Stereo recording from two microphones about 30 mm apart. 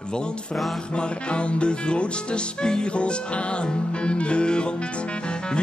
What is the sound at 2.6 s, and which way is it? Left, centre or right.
Music, left.